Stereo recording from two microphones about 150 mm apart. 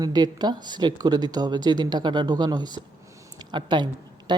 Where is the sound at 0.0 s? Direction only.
25° right (ahead or behind).